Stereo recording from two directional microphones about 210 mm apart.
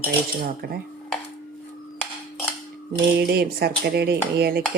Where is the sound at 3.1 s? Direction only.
50° right (ahead or behind).